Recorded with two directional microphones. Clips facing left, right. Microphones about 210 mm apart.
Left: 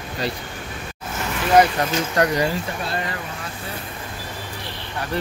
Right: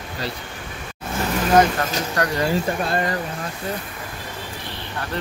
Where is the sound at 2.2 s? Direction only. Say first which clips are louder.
Left 4 dB; 25° left (ahead or behind).